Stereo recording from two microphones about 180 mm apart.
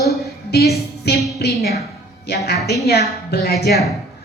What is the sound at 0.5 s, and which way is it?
Music, 60° left (ahead or behind).